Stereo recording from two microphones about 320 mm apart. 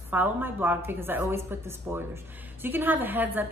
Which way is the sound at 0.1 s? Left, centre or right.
Centre.